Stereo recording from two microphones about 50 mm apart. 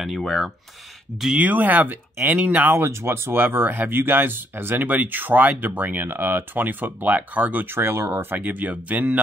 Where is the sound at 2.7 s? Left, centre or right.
Right.